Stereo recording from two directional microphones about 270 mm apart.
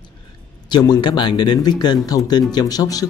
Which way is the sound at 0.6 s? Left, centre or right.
Centre.